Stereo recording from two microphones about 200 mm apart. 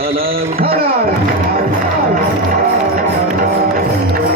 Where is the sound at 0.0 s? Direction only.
50° right (ahead or behind).